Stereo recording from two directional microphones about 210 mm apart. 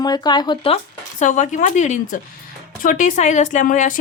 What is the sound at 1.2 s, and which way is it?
A woman's voice, 35° left (ahead or behind).